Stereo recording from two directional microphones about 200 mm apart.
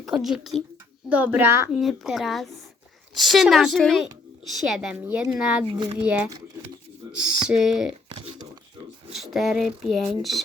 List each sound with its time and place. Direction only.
0.0 s a child's voice: centre (ahead or behind)
1.8 s speech: centre (ahead or behind)
5.6 s a child's voice: 25° right (ahead or behind)
6.0 s a child's voice: 5° right (ahead or behind)
9.1 s speech: centre (ahead or behind)